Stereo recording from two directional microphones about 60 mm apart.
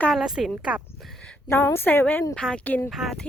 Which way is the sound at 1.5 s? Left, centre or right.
Left.